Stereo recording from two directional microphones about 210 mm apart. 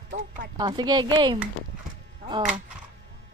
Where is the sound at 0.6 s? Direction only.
20° right (ahead or behind).